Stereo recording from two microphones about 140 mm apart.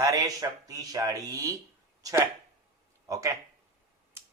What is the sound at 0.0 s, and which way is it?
Speech, 25° right (ahead or behind).